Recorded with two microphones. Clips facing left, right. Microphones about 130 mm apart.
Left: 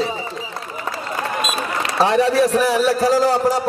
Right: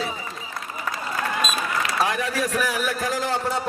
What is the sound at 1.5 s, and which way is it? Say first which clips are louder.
A man's voice: left 4 dB; 30° left (ahead or behind).